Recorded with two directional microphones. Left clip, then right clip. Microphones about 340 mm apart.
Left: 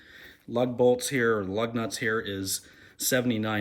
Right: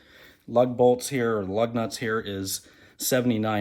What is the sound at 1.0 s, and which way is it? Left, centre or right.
Speech, right.